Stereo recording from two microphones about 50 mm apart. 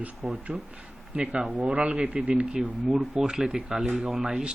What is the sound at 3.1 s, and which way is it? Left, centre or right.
Speech, centre.